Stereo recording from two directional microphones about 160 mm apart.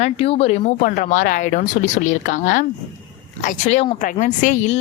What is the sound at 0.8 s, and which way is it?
Speech, 60° left (ahead or behind).